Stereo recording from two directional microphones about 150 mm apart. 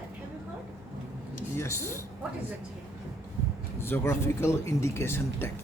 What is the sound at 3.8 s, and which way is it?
Speech, 15° left (ahead or behind).